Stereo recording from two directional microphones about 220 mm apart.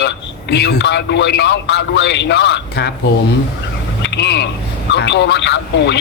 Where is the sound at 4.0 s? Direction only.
50° left (ahead or behind).